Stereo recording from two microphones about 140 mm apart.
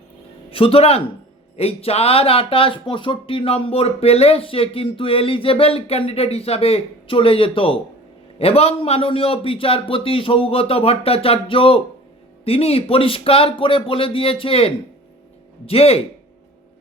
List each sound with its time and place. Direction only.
0.5 s speech: 40° left (ahead or behind)